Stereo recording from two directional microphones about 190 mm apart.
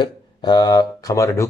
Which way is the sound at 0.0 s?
20° left (ahead or behind).